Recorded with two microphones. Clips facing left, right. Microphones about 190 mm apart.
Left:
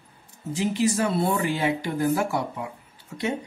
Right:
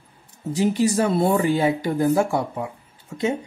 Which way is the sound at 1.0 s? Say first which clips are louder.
Right 4 dB; 40° right (ahead or behind).